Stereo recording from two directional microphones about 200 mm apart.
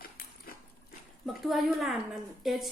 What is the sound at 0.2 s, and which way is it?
Dog, 50° left (ahead or behind).